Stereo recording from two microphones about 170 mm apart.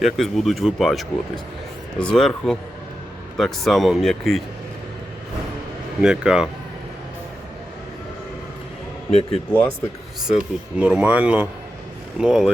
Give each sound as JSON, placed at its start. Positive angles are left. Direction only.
{"t": 0.0, "sound": "speech", "side_deg": 0}
{"t": 6.0, "sound": "speech", "side_deg": -5}
{"t": 9.0, "sound": "speech", "side_deg": 40}
{"t": 10.2, "sound": "speech", "side_deg": -5}